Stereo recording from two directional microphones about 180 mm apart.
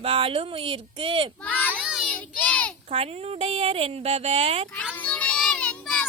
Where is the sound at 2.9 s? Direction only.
35° right (ahead or behind).